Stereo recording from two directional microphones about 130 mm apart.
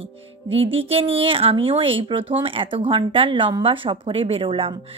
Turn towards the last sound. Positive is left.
turn(degrees=-45)  # may be behind; listen again after turning